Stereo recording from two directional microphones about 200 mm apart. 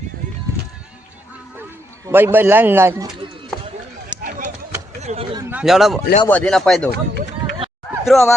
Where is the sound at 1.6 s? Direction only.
10° right (ahead or behind).